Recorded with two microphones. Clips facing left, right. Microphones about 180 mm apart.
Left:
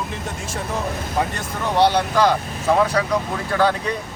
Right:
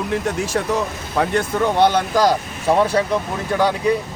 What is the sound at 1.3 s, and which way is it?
A man's voice, 55° right (ahead or behind).